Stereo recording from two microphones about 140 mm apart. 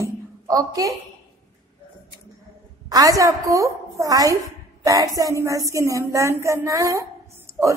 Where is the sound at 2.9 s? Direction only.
25° right (ahead or behind).